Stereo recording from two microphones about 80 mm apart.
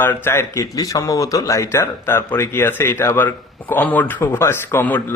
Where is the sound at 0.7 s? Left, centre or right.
Left.